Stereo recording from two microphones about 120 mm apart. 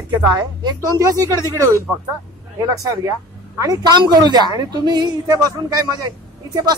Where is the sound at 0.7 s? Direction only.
30° right (ahead or behind).